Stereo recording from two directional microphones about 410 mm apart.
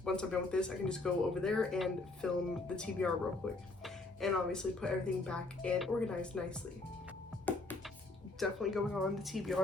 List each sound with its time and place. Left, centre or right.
0.0 s speech: centre
7.5 s music: centre
8.4 s speech: centre